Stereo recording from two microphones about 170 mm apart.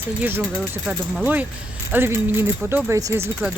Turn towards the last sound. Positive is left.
turn(degrees=-15)  # may be behind; listen again after turning